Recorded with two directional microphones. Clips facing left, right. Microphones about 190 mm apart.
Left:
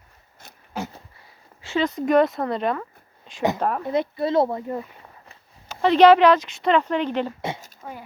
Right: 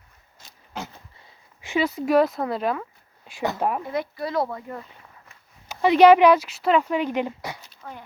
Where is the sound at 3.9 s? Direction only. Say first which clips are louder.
Left 5 dB; 25° left (ahead or behind).